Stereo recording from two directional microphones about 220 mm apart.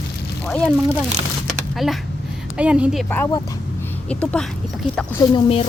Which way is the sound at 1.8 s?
Centre (ahead or behind).